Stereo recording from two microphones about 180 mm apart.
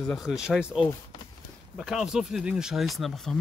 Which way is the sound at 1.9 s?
Centre (ahead or behind).